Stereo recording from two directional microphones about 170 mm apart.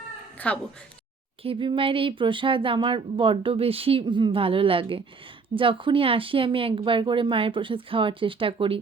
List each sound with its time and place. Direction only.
0.3 s meow: 10° left (ahead or behind)
1.5 s speech: 30° right (ahead or behind)